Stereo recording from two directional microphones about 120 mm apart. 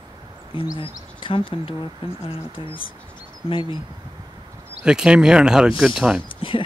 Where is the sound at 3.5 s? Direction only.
45° left (ahead or behind).